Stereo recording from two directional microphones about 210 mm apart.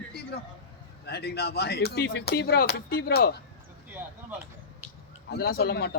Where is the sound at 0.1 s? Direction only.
50° left (ahead or behind).